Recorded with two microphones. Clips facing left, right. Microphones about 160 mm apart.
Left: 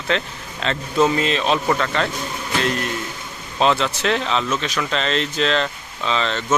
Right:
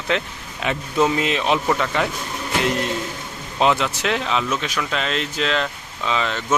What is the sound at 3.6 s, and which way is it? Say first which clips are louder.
Speech: even; 15° right (ahead or behind).